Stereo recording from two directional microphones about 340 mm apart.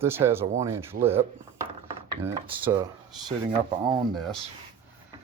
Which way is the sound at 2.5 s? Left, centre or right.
Centre.